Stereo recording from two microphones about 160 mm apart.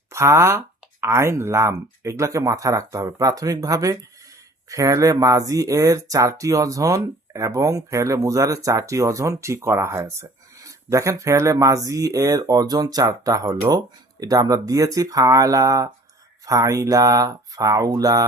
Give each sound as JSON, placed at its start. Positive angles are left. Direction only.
{"t": 0.1, "sound": "speech", "side_deg": -15}